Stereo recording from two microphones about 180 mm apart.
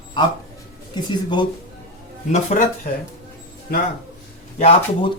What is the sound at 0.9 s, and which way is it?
Speech, 25° left (ahead or behind).